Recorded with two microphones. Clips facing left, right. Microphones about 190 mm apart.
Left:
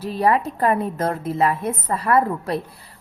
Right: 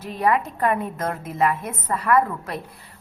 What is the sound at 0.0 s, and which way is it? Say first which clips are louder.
A woman's voice: left 2 dB; 35° left (ahead or behind).